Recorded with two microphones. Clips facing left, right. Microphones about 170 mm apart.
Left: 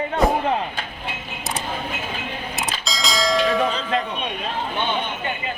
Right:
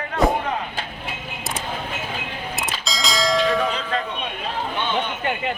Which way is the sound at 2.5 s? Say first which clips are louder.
Right 1 dB; centre (ahead or behind).